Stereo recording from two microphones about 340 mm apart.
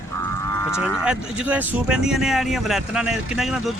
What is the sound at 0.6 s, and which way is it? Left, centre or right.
Speech, centre.